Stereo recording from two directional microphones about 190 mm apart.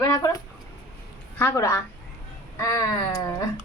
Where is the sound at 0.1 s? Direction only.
20° left (ahead or behind).